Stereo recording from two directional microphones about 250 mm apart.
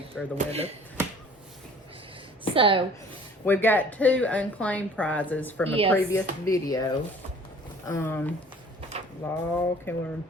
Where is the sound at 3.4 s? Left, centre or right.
Centre.